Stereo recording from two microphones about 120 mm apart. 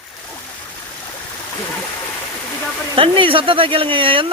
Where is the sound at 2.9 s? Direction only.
45° right (ahead or behind).